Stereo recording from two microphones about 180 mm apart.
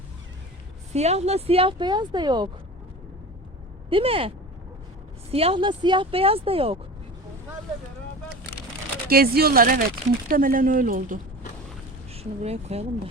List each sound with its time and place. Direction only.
0.9 s a woman's voice: 35° right (ahead or behind)
3.8 s a woman's voice: 30° right (ahead or behind)
5.3 s a woman's voice: 35° right (ahead or behind)
9.0 s speech: 55° right (ahead or behind)
12.1 s speech: 35° right (ahead or behind)